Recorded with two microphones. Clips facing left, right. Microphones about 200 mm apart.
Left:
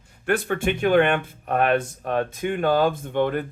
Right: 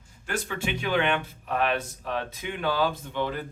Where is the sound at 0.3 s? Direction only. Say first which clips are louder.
Left 8 dB; 60° left (ahead or behind).